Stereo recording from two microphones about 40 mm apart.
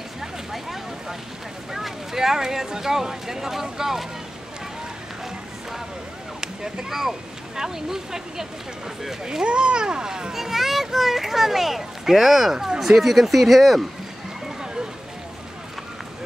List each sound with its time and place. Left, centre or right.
0.2 s vehicle: centre
1.7 s speech: centre
6.4 s speech: centre
10.3 s speech: centre
14.6 s a sound: centre